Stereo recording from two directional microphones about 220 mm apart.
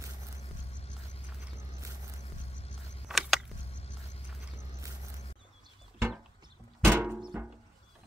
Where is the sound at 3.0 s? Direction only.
Centre (ahead or behind).